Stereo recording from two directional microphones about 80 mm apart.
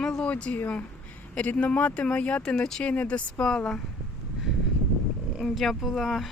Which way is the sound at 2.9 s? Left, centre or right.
Centre.